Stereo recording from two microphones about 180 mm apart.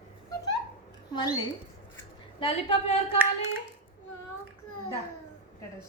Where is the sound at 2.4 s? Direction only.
30° left (ahead or behind).